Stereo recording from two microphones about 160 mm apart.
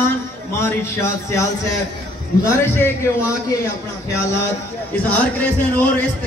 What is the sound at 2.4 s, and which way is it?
A man's voice, 15° left (ahead or behind).